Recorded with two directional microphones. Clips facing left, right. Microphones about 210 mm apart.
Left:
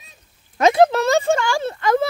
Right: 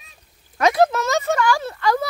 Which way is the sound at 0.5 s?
25° left (ahead or behind).